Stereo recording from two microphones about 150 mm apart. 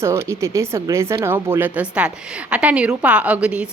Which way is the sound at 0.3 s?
20° right (ahead or behind).